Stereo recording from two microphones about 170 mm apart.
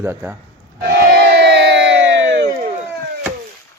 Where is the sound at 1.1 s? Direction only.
80° right.